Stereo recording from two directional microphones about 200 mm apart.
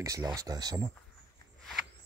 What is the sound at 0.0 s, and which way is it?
Speech, 15° right (ahead or behind).